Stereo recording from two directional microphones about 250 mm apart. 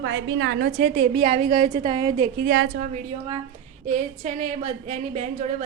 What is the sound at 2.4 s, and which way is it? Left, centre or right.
A woman's voice, right.